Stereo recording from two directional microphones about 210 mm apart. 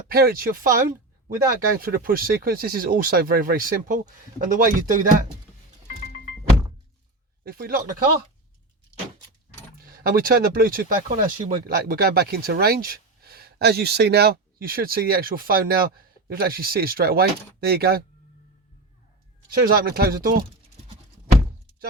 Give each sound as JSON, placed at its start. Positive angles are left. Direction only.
{"t": 0.1, "sound": "speech", "side_deg": -45}
{"t": 7.4, "sound": "speech", "side_deg": -45}
{"t": 9.7, "sound": "speech", "side_deg": -45}
{"t": 19.5, "sound": "speech", "side_deg": -45}